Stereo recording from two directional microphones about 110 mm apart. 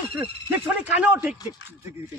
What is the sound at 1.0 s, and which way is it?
Speech, 10° right (ahead or behind).